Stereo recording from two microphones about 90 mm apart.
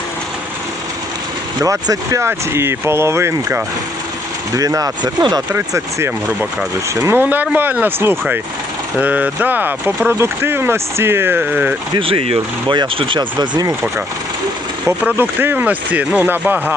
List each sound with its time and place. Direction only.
1.6 s speech: 40° right (ahead or behind)
4.5 s speech: 40° right (ahead or behind)
5.5 s speech: 30° right (ahead or behind)
11.9 s speech: 85° right
13.1 s speech: 55° right (ahead or behind)
15.0 s speech: 20° right (ahead or behind)